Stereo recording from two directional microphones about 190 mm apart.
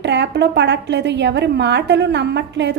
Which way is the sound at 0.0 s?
65° right (ahead or behind).